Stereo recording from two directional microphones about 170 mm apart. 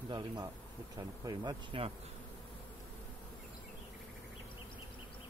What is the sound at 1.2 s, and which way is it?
Speech, 25° right (ahead or behind).